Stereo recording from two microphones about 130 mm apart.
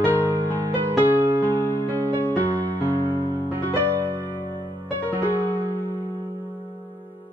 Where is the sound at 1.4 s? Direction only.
15° left (ahead or behind).